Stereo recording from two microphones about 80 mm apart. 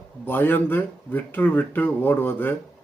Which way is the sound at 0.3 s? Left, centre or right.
Left.